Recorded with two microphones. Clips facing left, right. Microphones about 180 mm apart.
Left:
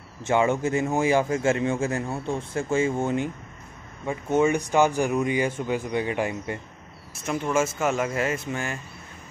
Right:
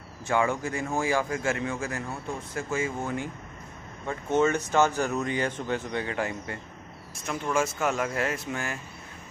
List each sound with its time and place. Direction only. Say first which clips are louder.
0.2 s a man's voice: left 4 dB; 20° left (ahead or behind)
4.0 s speech: left 2 dB; 10° left (ahead or behind)
7.2 s speech: left 3 dB; 5° left (ahead or behind)